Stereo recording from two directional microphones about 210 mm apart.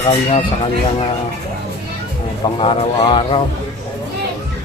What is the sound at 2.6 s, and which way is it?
Speech, 25° left (ahead or behind).